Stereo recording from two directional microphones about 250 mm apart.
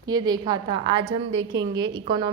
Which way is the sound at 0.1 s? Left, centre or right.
Centre.